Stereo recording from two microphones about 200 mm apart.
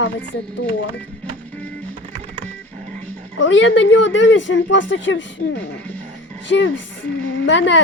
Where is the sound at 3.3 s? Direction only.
70° left (ahead or behind).